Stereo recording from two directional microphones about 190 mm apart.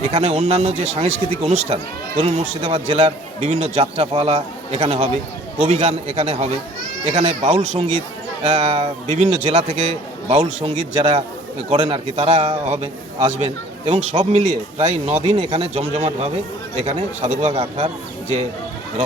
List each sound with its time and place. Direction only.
0.1 s speech: 35° right (ahead or behind)